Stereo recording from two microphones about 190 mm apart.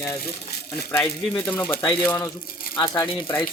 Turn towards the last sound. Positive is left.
turn(degrees=25)  # may be behind; listen again after turning